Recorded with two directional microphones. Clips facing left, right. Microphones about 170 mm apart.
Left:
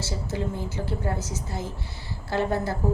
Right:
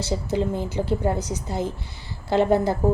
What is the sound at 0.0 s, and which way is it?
A woman's voice, 20° right (ahead or behind).